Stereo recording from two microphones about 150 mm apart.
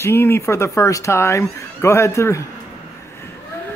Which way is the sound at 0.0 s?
15° left (ahead or behind).